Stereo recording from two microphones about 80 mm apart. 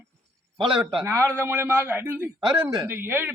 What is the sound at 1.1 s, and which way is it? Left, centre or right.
A man's voice, right.